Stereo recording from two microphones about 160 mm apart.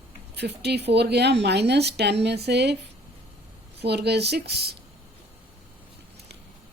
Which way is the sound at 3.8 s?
90° right.